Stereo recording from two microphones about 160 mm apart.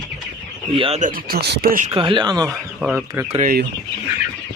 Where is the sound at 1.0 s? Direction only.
65° right (ahead or behind).